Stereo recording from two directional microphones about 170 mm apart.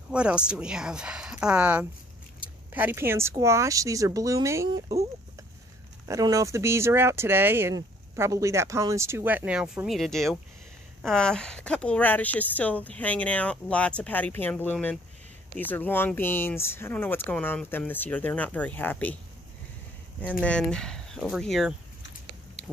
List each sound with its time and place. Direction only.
0.1 s speech: 5° right (ahead or behind); by 4.9 s 25° right (ahead or behind)
6.0 s speech: 20° right (ahead or behind); by 19.1 s 10° left (ahead or behind)
20.4 s speech: 5° left (ahead or behind)